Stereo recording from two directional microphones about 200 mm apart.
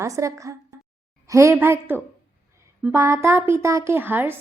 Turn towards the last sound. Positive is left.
turn(degrees=-10)  # may be behind; listen again after turning